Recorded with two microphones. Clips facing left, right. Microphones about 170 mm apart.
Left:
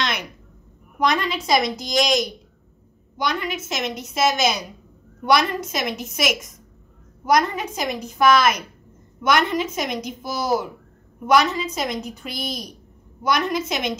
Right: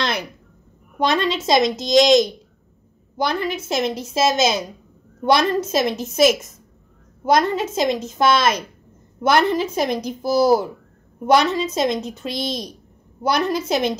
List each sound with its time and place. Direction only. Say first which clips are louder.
0.9 s a woman's voice: right 2 dB; 30° right (ahead or behind)